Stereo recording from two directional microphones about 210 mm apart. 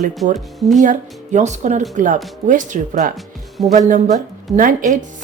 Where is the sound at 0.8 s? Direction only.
35° right (ahead or behind).